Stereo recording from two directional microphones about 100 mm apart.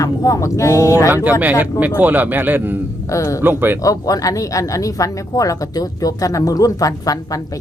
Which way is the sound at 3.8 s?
35° left (ahead or behind).